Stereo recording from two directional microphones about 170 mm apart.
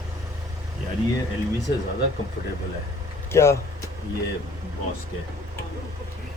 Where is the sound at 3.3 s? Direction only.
15° left (ahead or behind).